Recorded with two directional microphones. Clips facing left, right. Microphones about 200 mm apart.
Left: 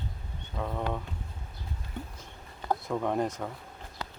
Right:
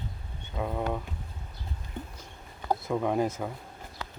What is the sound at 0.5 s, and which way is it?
Speech, 10° right (ahead or behind).